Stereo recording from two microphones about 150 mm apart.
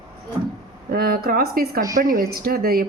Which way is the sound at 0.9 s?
85° right.